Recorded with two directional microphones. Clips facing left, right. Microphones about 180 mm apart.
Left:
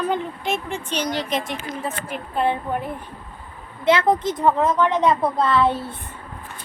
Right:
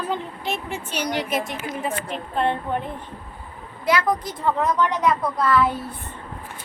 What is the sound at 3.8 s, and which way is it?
A woman's voice, 25° left (ahead or behind).